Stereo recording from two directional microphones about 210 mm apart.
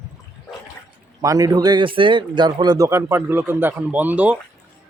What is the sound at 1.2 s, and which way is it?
Speech, 15° right (ahead or behind).